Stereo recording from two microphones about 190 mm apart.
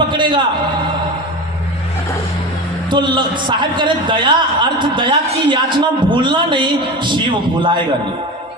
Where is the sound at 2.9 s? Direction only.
25° right (ahead or behind).